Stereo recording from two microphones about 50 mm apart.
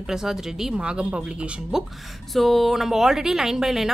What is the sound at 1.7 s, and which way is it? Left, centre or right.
Speech, centre.